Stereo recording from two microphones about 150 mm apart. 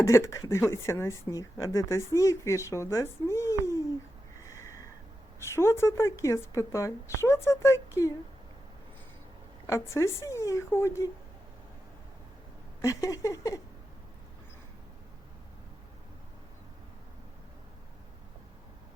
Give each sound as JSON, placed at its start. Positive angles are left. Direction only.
{"t": 0.0, "sound": "speech", "side_deg": 20}
{"t": 4.4, "sound": "a sound", "side_deg": 20}
{"t": 5.4, "sound": "speech", "side_deg": 15}
{"t": 9.6, "sound": "speech", "side_deg": 20}
{"t": 12.8, "sound": "speech", "side_deg": 20}